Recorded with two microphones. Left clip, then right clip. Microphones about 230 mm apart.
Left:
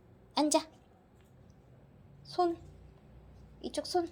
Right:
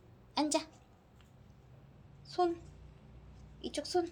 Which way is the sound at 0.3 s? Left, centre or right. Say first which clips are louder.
Left 4 dB; left.